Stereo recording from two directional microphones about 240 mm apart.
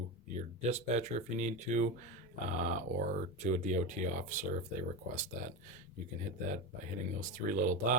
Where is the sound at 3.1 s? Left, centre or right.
Right.